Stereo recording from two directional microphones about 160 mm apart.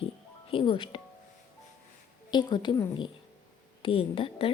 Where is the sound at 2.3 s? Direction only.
30° left (ahead or behind).